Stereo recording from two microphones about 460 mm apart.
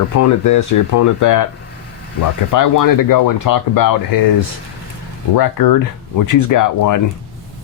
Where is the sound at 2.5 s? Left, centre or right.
Left.